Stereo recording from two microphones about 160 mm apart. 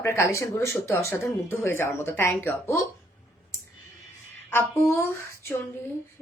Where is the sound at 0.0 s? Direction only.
15° left (ahead or behind).